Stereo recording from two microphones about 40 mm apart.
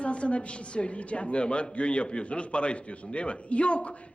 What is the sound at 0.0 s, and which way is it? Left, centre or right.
Speech, left.